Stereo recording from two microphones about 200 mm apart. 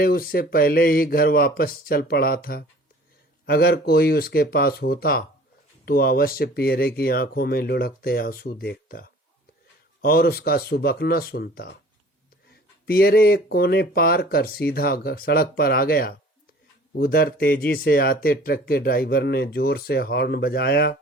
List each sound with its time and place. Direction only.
0.0 s speech: 50° left (ahead or behind)
12.8 s speech: 50° left (ahead or behind)